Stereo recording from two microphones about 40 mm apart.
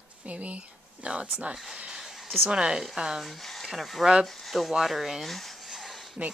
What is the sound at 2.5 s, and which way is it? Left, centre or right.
Speech, centre.